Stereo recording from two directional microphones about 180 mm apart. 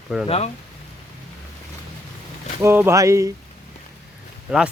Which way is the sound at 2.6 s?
15° right (ahead or behind).